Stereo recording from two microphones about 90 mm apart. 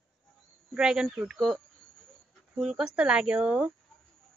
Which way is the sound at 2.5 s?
10° right (ahead or behind).